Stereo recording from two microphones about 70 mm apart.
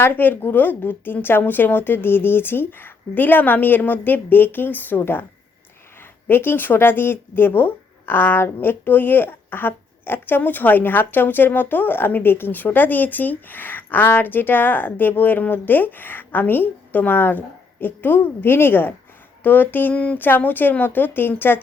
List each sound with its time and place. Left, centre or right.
0.0 s speech: left